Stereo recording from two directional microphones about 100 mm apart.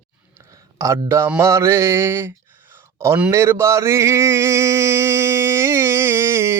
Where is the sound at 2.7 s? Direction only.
25° right (ahead or behind).